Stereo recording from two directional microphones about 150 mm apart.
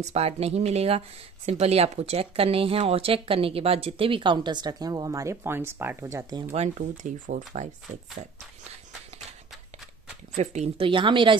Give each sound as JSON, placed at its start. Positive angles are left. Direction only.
{"t": 0.0, "sound": "speech", "side_deg": -45}
{"t": 6.8, "sound": "speech", "side_deg": -60}
{"t": 10.3, "sound": "speech", "side_deg": -50}
{"t": 10.9, "sound": "speech", "side_deg": -35}